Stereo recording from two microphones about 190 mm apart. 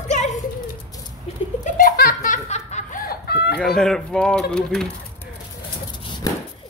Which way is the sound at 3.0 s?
55° left (ahead or behind).